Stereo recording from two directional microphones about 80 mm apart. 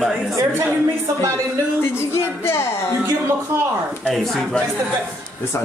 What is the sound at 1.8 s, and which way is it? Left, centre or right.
Speech, left.